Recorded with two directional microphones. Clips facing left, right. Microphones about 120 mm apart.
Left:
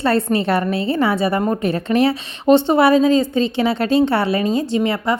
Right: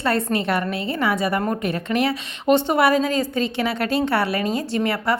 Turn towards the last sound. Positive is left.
turn(degrees=20)  # may be behind; listen again after turning